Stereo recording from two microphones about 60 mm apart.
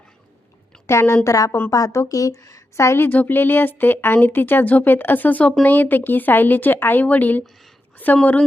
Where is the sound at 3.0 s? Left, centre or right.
Left.